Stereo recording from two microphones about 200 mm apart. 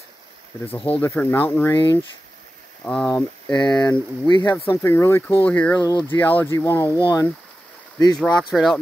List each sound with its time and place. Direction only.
0.7 s speech: 5° left (ahead or behind)
2.8 s speech: 5° left (ahead or behind)
8.2 s speech: centre (ahead or behind)